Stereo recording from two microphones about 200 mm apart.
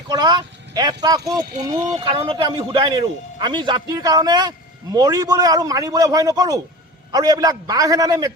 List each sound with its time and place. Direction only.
0.1 s a man's voice: 20° right (ahead or behind)